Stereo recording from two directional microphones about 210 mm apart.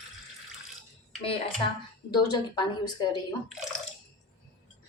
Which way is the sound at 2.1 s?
20° left (ahead or behind).